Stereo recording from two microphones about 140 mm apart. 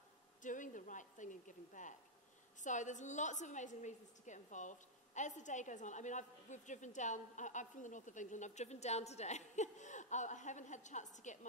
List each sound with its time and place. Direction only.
0.4 s a woman's voice: 65° left (ahead or behind)